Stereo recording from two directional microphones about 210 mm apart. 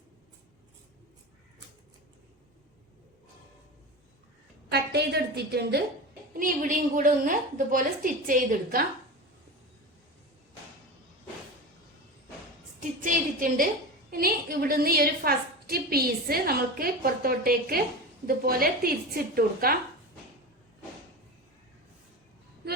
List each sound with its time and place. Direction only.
4.7 s a woman's voice: 50° right (ahead or behind)
13.1 s a sound: 40° right (ahead or behind)
14.1 s a woman's voice: 45° right (ahead or behind)